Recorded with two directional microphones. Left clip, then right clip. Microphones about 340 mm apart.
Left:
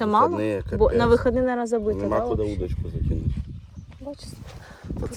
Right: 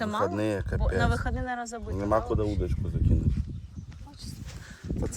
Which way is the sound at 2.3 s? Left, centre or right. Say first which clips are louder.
Left 4 dB; centre.